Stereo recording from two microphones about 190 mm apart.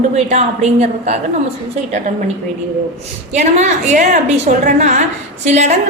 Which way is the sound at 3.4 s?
40° right (ahead or behind).